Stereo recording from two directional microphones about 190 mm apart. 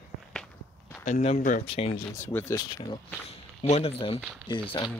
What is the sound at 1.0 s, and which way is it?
Speech, 40° left (ahead or behind).